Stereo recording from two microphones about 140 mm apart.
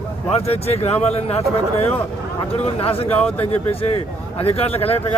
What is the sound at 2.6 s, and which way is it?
Speech, 45° left (ahead or behind).